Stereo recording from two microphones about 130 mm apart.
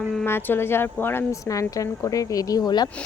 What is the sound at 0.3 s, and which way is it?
Speech, 15° left (ahead or behind).